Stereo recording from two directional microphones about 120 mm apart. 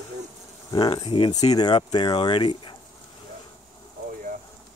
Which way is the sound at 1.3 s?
35° left (ahead or behind).